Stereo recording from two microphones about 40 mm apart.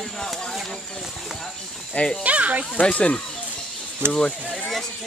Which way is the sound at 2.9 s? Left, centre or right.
Left.